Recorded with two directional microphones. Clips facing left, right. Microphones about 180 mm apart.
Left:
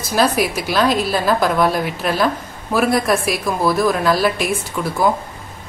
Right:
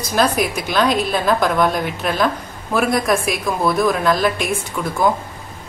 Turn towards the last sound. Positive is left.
turn(degrees=5)  # may be behind; listen again after turning